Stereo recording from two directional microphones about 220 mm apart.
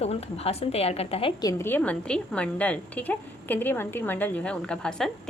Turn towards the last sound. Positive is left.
turn(degrees=5)  # may be behind; listen again after turning